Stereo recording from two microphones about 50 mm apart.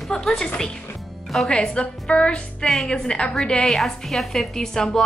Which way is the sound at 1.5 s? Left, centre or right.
Centre.